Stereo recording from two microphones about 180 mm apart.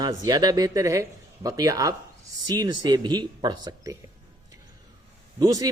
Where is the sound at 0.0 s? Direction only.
20° right (ahead or behind).